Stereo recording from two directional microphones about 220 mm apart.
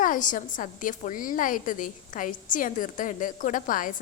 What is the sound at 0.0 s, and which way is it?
A woman's voice, 35° left (ahead or behind).